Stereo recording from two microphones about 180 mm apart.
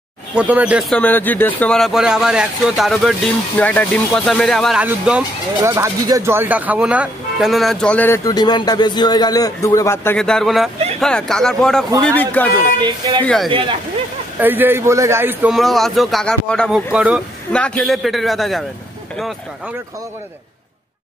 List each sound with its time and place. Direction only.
0.3 s speech: 5° right (ahead or behind)
0.9 s speech: 10° left (ahead or behind); by 5.2 s 5° right (ahead or behind)
5.6 s speech: 20° right (ahead or behind); by 8.2 s 10° left (ahead or behind)
8.3 s speech: 20° left (ahead or behind)
12.5 s speech: 25° right (ahead or behind)
13.2 s speech: 5° left (ahead or behind)
14.4 s speech: 10° right (ahead or behind)
15.5 s speech: centre (ahead or behind)